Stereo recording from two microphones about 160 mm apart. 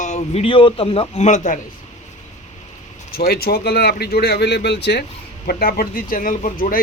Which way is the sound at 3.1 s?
70° left (ahead or behind).